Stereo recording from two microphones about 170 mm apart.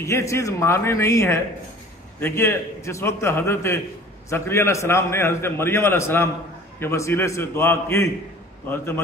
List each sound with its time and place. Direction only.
0.0 s a man's voice: 15° left (ahead or behind)